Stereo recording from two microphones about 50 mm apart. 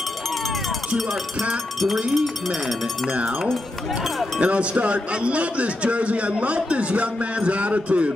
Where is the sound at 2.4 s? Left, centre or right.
Centre.